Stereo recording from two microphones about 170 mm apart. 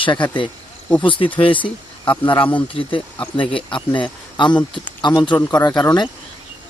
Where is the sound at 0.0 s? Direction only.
30° left (ahead or behind).